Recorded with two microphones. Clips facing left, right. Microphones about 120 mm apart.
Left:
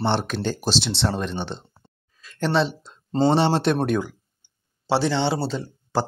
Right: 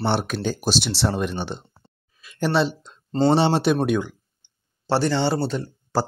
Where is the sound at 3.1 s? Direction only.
20° left (ahead or behind).